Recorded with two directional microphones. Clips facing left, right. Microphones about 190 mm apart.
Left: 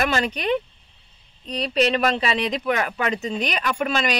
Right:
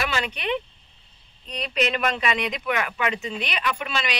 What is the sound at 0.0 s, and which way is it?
Speech, 40° left (ahead or behind).